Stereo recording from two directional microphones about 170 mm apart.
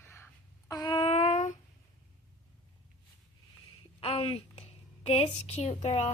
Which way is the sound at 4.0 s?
35° left (ahead or behind).